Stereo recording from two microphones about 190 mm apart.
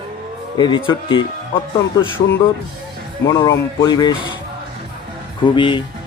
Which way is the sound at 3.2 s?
20° left (ahead or behind).